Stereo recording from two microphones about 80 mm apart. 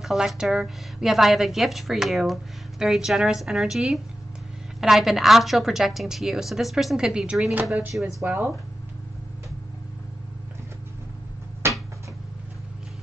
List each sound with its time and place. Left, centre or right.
0.0 s a woman's voice: centre
11.6 s cupboard open or close: right